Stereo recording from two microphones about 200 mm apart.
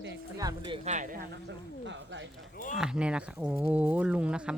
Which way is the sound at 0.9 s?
45° right (ahead or behind).